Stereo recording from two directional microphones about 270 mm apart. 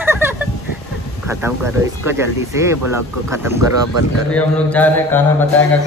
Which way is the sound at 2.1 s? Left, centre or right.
Centre.